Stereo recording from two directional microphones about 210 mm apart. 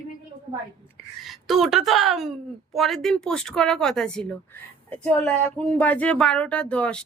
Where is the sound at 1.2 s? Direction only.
Centre (ahead or behind).